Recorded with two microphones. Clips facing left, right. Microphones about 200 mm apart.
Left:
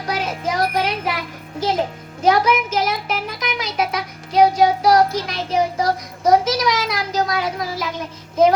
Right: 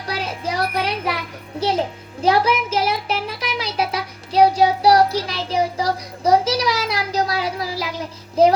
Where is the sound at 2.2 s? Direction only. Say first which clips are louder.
Left 1 dB; 30° right (ahead or behind).